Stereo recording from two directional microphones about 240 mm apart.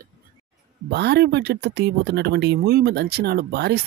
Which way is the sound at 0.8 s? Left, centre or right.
Right.